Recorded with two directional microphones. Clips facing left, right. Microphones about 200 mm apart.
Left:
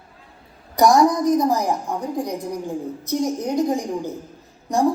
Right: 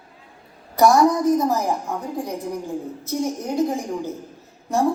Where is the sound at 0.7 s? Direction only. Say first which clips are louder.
Even; 15° left (ahead or behind).